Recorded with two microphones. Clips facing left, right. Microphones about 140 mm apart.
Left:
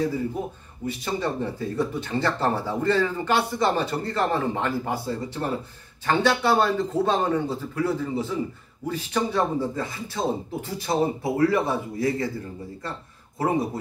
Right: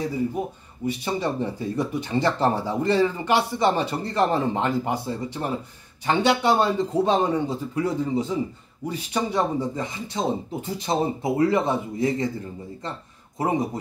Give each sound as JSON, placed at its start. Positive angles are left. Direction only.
{"t": 0.4, "sound": "a man's voice", "side_deg": -80}
{"t": 0.8, "sound": "speech", "side_deg": -15}